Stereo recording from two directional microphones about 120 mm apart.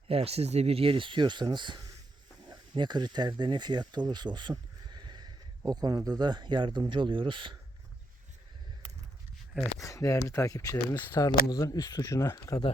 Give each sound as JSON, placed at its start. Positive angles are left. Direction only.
{"t": 0.1, "sound": "speech", "side_deg": -60}
{"t": 4.5, "sound": "a sound", "side_deg": -35}
{"t": 6.0, "sound": "speech", "side_deg": -35}
{"t": 9.8, "sound": "speech", "side_deg": 25}